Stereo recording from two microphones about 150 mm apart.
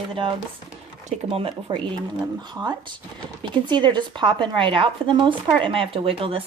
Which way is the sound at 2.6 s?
15° right (ahead or behind).